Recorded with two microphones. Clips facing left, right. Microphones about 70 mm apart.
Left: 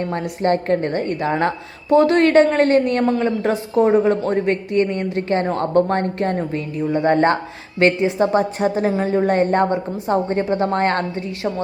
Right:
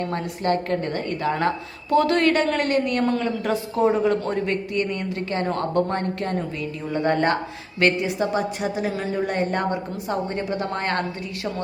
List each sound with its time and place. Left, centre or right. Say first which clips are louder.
0.1 s a woman's voice: left 6 dB; left